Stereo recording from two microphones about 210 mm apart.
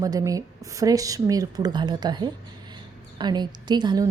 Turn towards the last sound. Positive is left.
turn(degrees=-20)  # may be behind; listen again after turning